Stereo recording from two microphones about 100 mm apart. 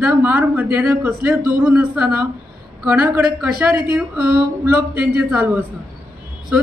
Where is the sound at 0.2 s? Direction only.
20° right (ahead or behind).